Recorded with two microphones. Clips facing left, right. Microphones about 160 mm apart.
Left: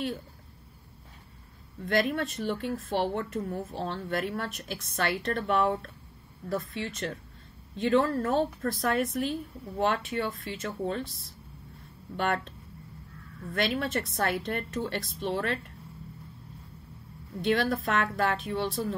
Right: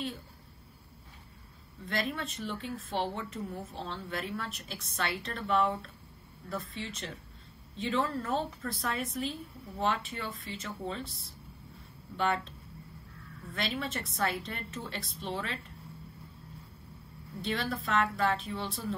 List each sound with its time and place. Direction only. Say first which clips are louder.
1.9 s speech: left 7 dB; 55° left (ahead or behind)
12.2 s speech: left 2 dB; 55° left (ahead or behind)
13.6 s speech: left 6 dB; 55° left (ahead or behind)
17.5 s speech: left 7 dB; 55° left (ahead or behind)